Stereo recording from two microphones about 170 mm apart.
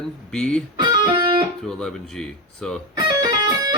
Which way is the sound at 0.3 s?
5° left (ahead or behind).